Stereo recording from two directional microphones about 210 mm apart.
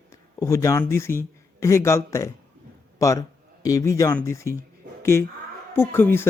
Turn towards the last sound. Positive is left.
turn(degrees=10)  # may be behind; listen again after turning